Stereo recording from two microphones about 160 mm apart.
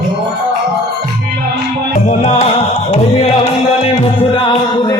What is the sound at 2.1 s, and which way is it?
Music, 40° left (ahead or behind).